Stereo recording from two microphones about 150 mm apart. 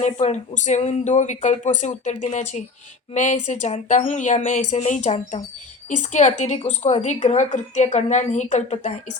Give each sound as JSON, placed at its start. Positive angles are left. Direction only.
{"t": 0.0, "sound": "a woman's voice", "side_deg": 45}